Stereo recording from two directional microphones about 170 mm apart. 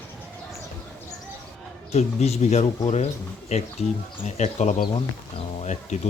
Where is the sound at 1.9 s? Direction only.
40° left (ahead or behind).